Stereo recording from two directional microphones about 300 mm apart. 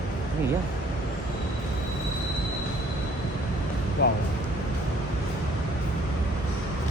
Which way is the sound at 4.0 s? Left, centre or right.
Left.